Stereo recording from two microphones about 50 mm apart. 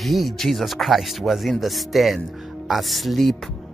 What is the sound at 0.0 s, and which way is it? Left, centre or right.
Speech, centre.